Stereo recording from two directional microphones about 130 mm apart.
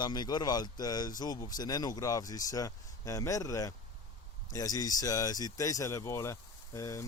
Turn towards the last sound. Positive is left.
turn(degrees=25)  # may be behind; listen again after turning